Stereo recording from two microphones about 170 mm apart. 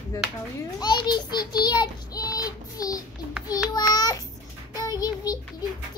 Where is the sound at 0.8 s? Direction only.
25° left (ahead or behind).